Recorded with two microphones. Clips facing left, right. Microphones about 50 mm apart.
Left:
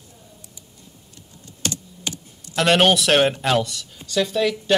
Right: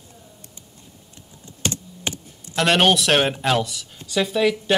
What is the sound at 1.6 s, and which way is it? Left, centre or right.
Computer keyboard, right.